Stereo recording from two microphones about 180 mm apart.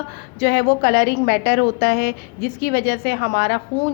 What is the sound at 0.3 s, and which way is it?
A woman's voice, 55° left (ahead or behind).